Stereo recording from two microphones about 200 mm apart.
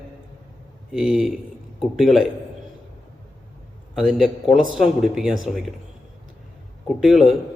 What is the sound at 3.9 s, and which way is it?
Speech, centre (ahead or behind).